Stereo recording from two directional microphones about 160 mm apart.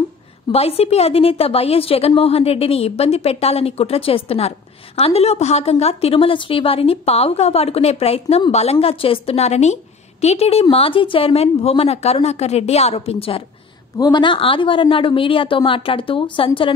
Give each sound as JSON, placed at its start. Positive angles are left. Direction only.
{"t": 0.5, "sound": "a woman's voice", "side_deg": 40}
{"t": 13.9, "sound": "a woman's voice", "side_deg": 25}